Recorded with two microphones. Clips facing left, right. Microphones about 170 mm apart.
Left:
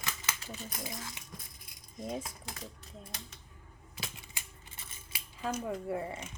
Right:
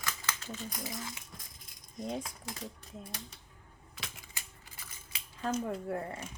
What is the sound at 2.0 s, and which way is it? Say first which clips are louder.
Speech: right 1 dB; 5° left (ahead or behind).